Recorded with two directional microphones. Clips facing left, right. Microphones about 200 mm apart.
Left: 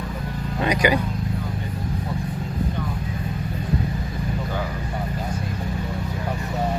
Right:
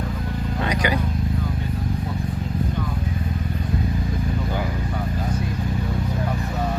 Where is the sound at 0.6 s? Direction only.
10° left (ahead or behind).